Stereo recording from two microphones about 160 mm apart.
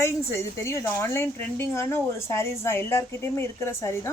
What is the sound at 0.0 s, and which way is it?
Speech, 15° left (ahead or behind).